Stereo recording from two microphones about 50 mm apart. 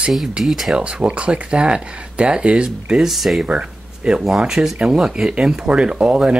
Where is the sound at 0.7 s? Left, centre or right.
Centre.